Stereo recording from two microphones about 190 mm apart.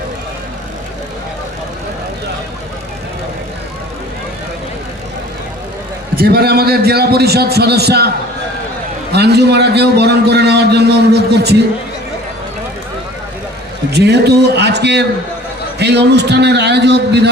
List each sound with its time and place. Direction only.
6.1 s a man's voice: 55° right (ahead or behind)
9.1 s a man's voice: 60° right (ahead or behind)
13.9 s a man's voice: 60° right (ahead or behind)